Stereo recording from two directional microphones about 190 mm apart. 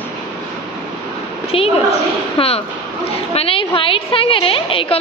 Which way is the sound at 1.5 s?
30° left (ahead or behind).